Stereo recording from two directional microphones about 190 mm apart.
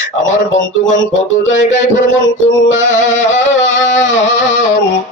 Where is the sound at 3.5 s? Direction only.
80° left.